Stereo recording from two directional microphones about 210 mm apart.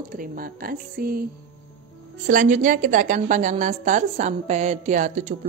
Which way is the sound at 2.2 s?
35° right (ahead or behind).